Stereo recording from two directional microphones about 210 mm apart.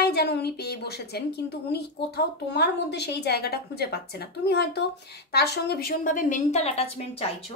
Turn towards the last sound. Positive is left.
turn(degrees=30)  # may be behind; listen again after turning